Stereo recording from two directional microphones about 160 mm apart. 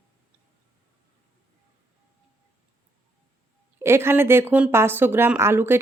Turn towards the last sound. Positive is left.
turn(degrees=-15)  # may be behind; listen again after turning